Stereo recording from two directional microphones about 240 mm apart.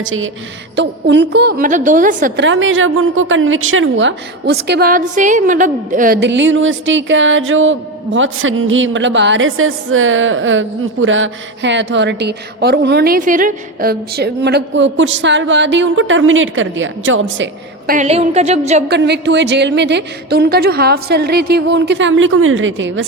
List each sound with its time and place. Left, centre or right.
0.0 s a woman's voice: right
2.4 s a woman's voice: right
17.9 s a sound: right
18.9 s a woman's voice: right